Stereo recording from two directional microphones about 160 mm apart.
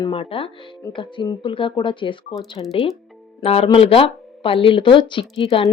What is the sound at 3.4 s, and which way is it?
Speech, 40° left (ahead or behind).